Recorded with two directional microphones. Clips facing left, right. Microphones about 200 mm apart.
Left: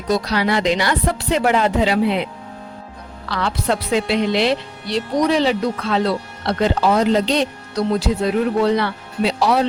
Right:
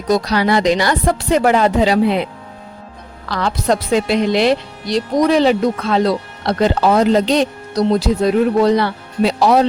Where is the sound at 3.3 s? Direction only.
45° right (ahead or behind).